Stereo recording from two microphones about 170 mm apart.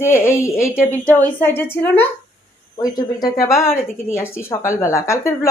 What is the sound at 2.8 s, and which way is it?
A woman's voice, 20° left (ahead or behind).